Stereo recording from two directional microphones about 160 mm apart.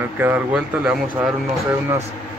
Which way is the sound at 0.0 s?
10° right (ahead or behind).